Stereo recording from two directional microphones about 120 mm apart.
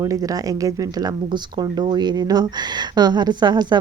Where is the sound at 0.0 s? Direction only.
30° right (ahead or behind).